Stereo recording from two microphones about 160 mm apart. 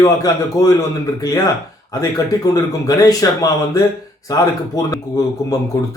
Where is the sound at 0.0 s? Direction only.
20° left (ahead or behind).